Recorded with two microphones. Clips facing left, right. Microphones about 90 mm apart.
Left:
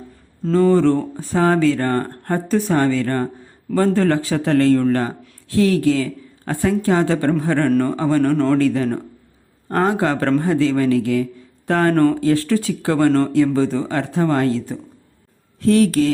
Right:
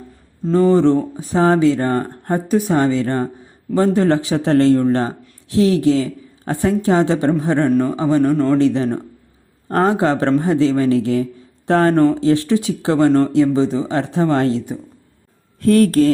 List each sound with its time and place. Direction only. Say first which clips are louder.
0.5 s speech: right 1 dB; 20° right (ahead or behind)
7.7 s a man's voice: right 1 dB; 5° right (ahead or behind); by 14.6 s 25° right (ahead or behind)
15.6 s speech: right 2 dB; 45° right (ahead or behind)